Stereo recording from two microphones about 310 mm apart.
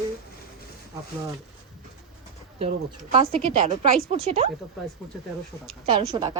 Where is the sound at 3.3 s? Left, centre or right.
Right.